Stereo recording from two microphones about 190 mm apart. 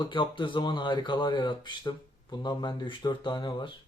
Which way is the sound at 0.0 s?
25° left (ahead or behind).